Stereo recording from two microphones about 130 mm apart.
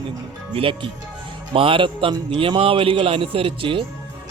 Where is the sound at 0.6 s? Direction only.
40° right (ahead or behind).